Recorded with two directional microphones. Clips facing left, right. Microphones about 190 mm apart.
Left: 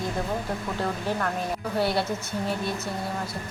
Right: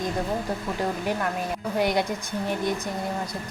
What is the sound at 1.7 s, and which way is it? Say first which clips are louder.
Speech: right 2 dB; 15° right (ahead or behind).